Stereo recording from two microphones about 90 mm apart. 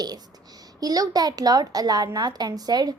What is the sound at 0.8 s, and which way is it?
A woman's voice, 45° right (ahead or behind).